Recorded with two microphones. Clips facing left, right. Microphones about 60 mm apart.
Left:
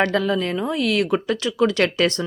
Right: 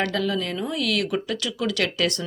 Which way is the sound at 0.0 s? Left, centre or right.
Left.